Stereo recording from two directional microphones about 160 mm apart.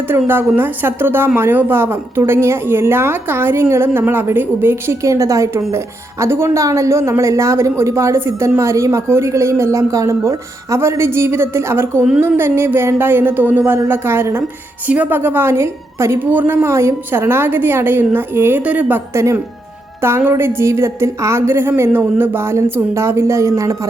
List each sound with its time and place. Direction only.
0.1 s speech: 15° right (ahead or behind)